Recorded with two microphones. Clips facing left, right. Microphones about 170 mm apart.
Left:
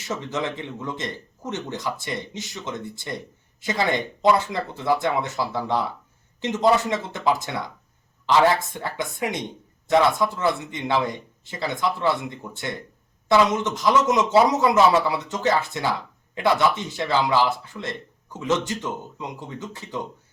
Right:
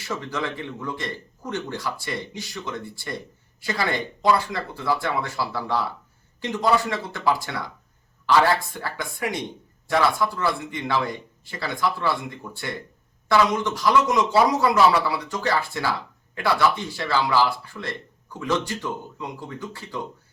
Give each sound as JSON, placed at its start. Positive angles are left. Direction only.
{"t": 0.0, "sound": "speech", "side_deg": 20}